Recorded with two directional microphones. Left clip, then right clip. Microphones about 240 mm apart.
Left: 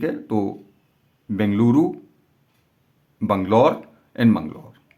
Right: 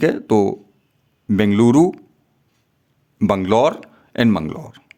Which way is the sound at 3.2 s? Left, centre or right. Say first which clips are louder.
Right 2 dB; right.